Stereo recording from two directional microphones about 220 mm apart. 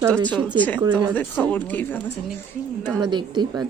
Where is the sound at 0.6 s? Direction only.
5° left (ahead or behind).